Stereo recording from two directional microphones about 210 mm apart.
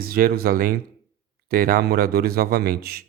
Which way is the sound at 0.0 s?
45° right (ahead or behind).